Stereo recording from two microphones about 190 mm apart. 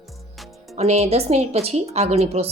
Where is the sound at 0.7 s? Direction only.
35° right (ahead or behind).